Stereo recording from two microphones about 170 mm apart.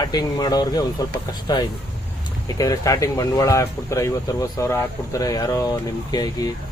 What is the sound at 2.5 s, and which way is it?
Speech, 20° left (ahead or behind).